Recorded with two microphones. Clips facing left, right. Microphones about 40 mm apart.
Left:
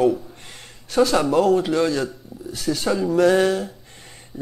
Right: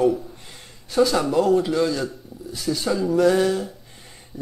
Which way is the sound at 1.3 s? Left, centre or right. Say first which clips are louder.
Left 1 dB; left.